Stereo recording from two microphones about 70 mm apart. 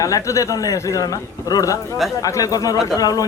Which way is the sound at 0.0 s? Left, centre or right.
Left.